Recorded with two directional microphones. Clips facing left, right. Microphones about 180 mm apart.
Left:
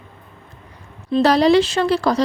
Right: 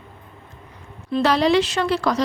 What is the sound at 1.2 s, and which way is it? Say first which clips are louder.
Speech: left 4 dB; 35° left (ahead or behind).